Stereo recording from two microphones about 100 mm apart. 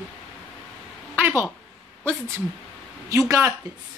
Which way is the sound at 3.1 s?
35° right (ahead or behind).